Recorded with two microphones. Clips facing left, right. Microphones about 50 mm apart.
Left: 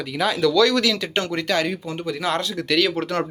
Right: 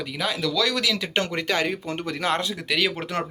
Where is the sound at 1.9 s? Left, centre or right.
Right.